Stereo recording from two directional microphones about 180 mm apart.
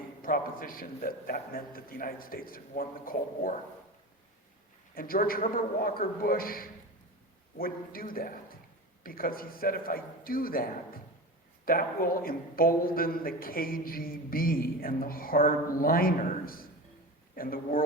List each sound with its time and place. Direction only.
0.2 s a man's voice: 50° left (ahead or behind)
4.9 s a man's voice: 55° left (ahead or behind)